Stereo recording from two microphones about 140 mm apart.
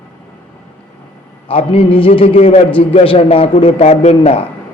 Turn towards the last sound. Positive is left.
turn(degrees=50)  # may be behind; listen again after turning